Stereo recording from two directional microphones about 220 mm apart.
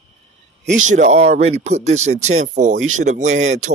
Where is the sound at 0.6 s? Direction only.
35° right (ahead or behind).